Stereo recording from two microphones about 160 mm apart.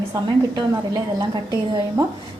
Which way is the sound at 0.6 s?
25° right (ahead or behind).